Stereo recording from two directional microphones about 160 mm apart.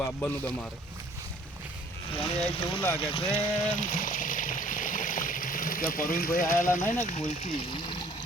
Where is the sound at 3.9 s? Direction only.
55° left (ahead or behind).